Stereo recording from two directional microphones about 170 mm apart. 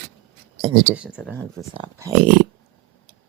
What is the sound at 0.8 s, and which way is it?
Speech, 5° right (ahead or behind).